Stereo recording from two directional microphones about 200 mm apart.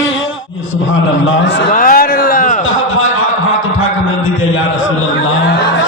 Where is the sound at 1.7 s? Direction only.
45° left (ahead or behind).